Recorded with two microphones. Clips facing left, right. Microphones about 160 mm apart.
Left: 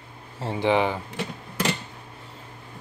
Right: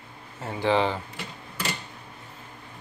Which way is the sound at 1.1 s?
90° left.